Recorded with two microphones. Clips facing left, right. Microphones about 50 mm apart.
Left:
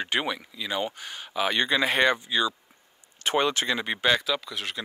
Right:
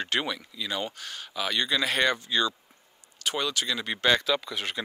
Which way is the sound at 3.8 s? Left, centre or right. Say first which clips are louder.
Right 2 dB; centre.